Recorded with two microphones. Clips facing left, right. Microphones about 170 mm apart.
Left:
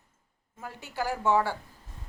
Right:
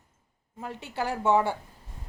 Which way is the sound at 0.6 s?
20° right (ahead or behind).